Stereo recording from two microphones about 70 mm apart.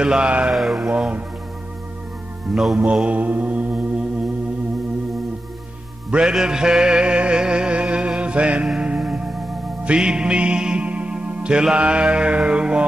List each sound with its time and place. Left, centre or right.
0.0 s speech: centre
0.6 s music: centre
0.8 s speech: centre
2.5 s music: centre
2.8 s mantra: centre
6.0 s music: centre
8.2 s mantra: centre
8.6 s music: centre